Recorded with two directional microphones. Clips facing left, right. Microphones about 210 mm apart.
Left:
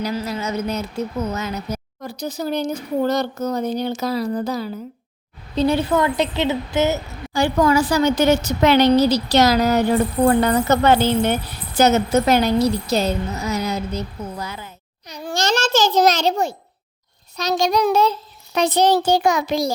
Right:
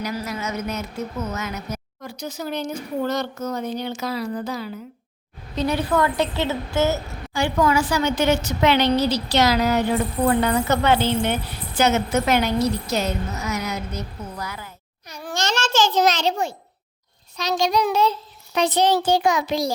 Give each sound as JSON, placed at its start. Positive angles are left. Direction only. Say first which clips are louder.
{"t": 0.0, "sound": "speech", "louder": "left 3 dB", "side_deg": 30}
{"t": 5.5, "sound": "a woman's voice", "louder": "left 3 dB", "side_deg": 25}
{"t": 7.3, "sound": "speech", "louder": "left 3 dB", "side_deg": 35}
{"t": 15.3, "sound": "a child's voice", "louder": "left 4 dB", "side_deg": 35}